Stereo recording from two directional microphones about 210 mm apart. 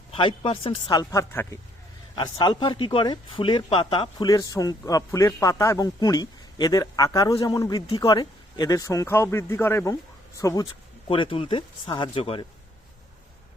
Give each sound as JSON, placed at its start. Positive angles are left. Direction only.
{"t": 0.1, "sound": "speech", "side_deg": 25}